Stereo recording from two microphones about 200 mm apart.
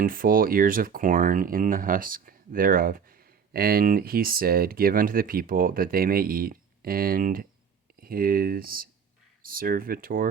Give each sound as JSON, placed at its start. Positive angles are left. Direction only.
{"t": 0.0, "sound": "speech", "side_deg": -45}